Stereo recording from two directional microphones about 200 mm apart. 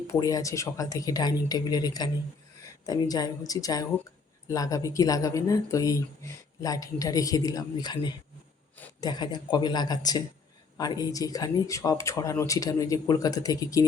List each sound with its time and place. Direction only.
0.1 s a woman's voice: 15° left (ahead or behind)